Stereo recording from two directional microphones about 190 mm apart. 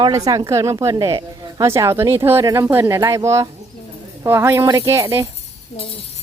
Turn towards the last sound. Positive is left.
turn(degrees=-15)  # may be behind; listen again after turning